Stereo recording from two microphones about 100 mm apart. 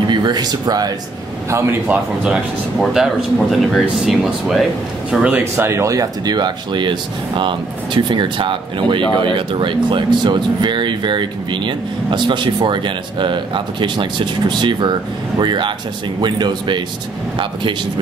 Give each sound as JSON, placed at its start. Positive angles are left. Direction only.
{"t": 0.0, "sound": "speech", "side_deg": -50}
{"t": 1.5, "sound": "a man's voice", "side_deg": -20}
{"t": 2.8, "sound": "speech", "side_deg": 0}
{"t": 5.1, "sound": "speech", "side_deg": -10}
{"t": 5.4, "sound": "speech", "side_deg": -25}